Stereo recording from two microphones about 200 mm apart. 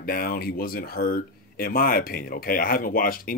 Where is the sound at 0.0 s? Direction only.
45° left (ahead or behind).